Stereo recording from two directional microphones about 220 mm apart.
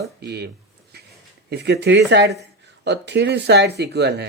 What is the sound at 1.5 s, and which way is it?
Speech, 50° right (ahead or behind).